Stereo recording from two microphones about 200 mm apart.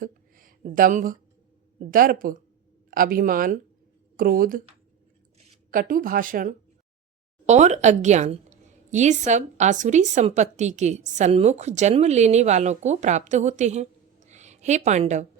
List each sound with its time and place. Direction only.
0.0 s a sound: 45° right (ahead or behind)
1.8 s speech: 45° right (ahead or behind)
5.7 s a woman's voice: 45° right (ahead or behind)